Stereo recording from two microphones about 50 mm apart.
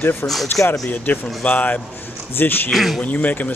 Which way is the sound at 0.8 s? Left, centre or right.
Left.